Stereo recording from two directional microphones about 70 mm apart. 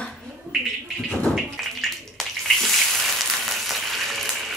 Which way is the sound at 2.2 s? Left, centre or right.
Centre.